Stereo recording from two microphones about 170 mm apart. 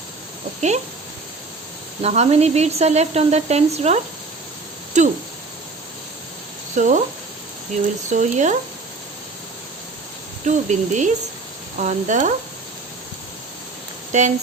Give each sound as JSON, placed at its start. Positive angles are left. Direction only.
{"t": 2.0, "sound": "speech", "side_deg": -40}
{"t": 6.7, "sound": "speech", "side_deg": -50}
{"t": 8.1, "sound": "speech", "side_deg": -45}
{"t": 10.4, "sound": "speech", "side_deg": -45}
{"t": 14.1, "sound": "speech", "side_deg": -45}